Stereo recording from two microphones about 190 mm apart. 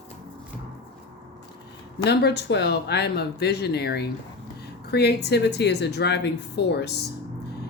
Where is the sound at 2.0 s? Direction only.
60° left (ahead or behind).